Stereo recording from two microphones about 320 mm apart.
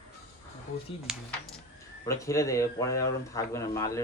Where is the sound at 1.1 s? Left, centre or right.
Centre.